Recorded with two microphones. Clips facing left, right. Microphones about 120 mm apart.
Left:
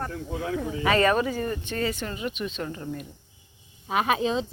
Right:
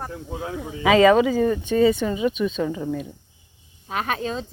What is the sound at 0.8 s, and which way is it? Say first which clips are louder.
Speech: right 8 dB; 90° right.